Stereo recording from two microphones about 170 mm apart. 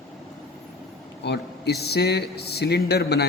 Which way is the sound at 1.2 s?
75° left (ahead or behind).